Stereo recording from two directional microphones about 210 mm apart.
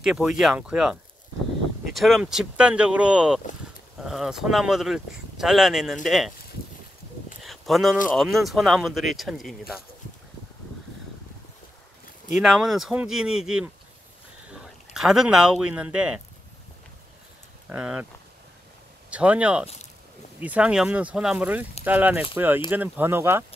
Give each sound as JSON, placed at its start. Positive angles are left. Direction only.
{"t": 0.0, "sound": "speech", "side_deg": 0}
{"t": 2.0, "sound": "speech", "side_deg": 0}
{"t": 7.4, "sound": "a sound", "side_deg": 0}
{"t": 8.1, "sound": "speech", "side_deg": 0}
{"t": 12.4, "sound": "speech", "side_deg": 0}
{"t": 14.5, "sound": "speech", "side_deg": -5}
{"t": 17.6, "sound": "speech", "side_deg": -5}
{"t": 19.0, "sound": "speech", "side_deg": -5}